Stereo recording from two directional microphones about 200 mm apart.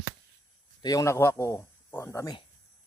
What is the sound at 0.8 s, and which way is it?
A man's voice, 15° left (ahead or behind).